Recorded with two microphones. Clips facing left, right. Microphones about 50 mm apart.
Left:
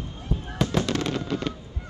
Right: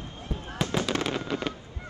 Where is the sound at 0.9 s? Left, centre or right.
Centre.